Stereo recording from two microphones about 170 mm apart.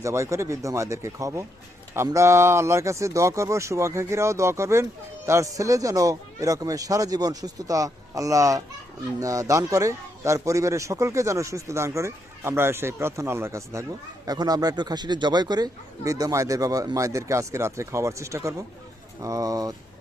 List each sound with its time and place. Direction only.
0.0 s a man's voice: 15° right (ahead or behind)